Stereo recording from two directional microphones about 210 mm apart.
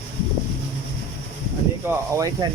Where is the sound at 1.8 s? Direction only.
10° right (ahead or behind).